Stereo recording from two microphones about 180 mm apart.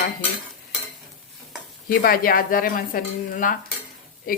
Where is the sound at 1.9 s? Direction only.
55° left (ahead or behind).